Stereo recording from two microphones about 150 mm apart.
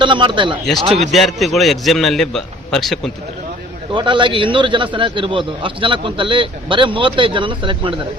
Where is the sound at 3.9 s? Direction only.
30° right (ahead or behind).